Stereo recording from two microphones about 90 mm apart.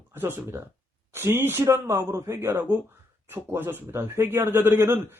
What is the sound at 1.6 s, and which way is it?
A man's voice, 35° right (ahead or behind).